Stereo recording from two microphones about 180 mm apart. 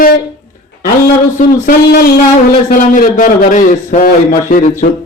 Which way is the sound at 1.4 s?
55° left (ahead or behind).